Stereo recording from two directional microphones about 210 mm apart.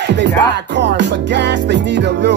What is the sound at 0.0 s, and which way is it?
Music, 55° right (ahead or behind).